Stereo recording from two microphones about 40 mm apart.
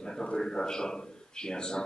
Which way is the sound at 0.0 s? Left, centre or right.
Centre.